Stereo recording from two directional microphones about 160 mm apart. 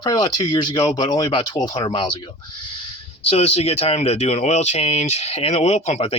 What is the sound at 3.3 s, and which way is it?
Speech, 40° left (ahead or behind).